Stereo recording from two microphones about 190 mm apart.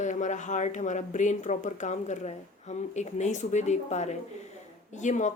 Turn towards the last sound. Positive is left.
turn(degrees=40)  # may be behind; listen again after turning